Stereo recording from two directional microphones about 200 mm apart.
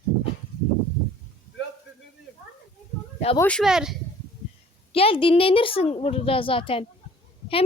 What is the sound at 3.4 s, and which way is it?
Speech, 5° left (ahead or behind).